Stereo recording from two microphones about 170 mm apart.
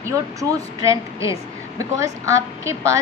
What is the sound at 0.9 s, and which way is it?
A woman's voice, 20° right (ahead or behind).